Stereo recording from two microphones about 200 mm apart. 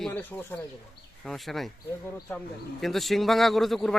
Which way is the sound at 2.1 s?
10° left (ahead or behind).